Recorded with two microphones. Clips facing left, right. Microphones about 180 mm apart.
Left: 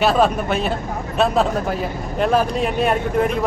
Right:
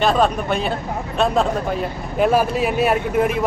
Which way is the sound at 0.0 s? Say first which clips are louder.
Left 1 dB; 5° left (ahead or behind).